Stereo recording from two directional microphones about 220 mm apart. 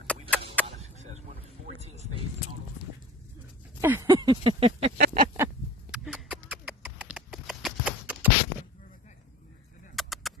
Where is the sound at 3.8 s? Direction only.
15° right (ahead or behind).